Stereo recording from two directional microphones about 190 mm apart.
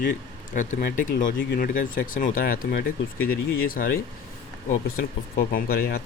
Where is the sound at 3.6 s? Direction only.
45° left (ahead or behind).